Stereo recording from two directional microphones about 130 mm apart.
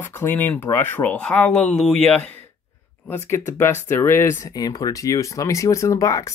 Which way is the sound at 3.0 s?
20° left (ahead or behind).